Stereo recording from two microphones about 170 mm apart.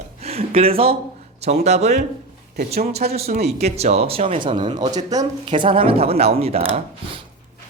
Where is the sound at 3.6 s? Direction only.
40° right (ahead or behind).